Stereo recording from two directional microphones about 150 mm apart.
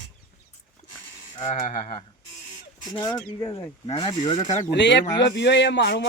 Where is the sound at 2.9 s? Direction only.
25° left (ahead or behind).